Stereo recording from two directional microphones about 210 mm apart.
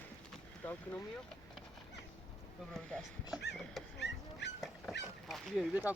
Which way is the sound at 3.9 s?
55° left (ahead or behind).